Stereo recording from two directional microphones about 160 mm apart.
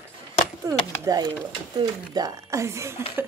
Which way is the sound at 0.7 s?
25° right (ahead or behind).